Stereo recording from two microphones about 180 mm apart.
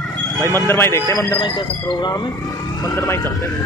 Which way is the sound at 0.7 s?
15° left (ahead or behind).